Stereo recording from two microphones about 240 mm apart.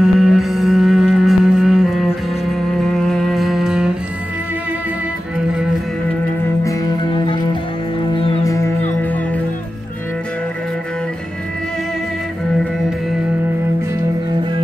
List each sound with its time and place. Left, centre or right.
0.0 s music: centre
6.6 s music: centre